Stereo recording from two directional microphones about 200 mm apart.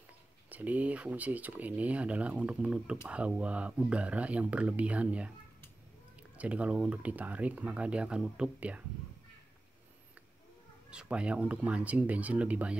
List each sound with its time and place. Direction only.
0.5 s speech: 10° right (ahead or behind)
6.3 s speech: 5° right (ahead or behind)
10.9 s speech: 5° right (ahead or behind)